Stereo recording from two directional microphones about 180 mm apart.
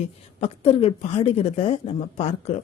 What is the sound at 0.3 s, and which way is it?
A woman's voice, 35° left (ahead or behind).